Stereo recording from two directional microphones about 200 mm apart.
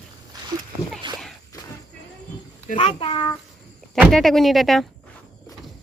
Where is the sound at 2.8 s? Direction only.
25° left (ahead or behind).